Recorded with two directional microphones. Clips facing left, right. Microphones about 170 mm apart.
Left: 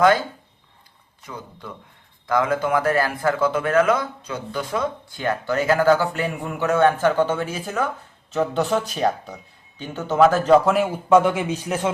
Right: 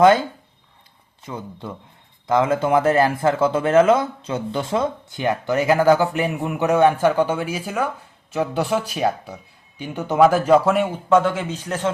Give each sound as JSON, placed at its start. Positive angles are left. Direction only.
{"t": 1.2, "sound": "speech", "side_deg": -25}
{"t": 10.7, "sound": "speech", "side_deg": 0}